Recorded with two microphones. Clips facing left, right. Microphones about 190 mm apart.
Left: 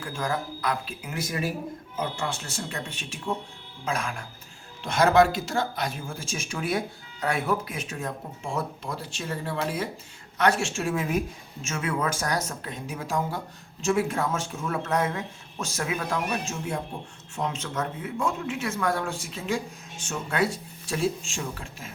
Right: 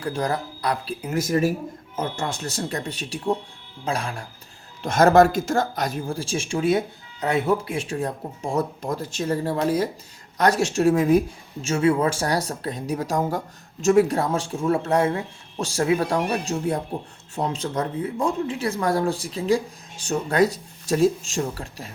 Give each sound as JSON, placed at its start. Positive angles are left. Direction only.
{"t": 0.0, "sound": "speech", "side_deg": -35}
{"t": 4.8, "sound": "speech", "side_deg": -45}